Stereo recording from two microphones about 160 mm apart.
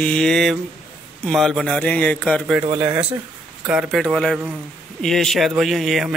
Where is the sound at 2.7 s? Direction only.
10° right (ahead or behind).